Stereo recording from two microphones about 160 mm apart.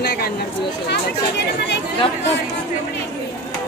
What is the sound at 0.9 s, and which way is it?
Speech, 90° left.